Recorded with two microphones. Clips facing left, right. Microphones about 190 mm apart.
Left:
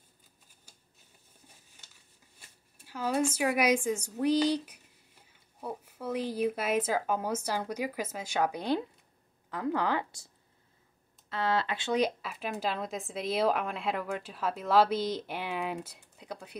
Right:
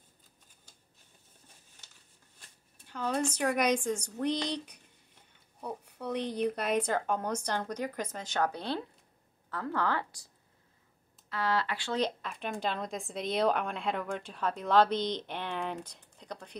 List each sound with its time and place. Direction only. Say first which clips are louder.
2.3 s speech: even; 5° left (ahead or behind)
11.2 s speech: left 1 dB; 25° left (ahead or behind)
12.0 s speech: left 2 dB; 5° left (ahead or behind)